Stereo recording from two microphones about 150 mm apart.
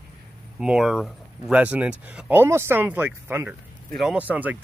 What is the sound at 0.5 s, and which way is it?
Speech, 5° right (ahead or behind).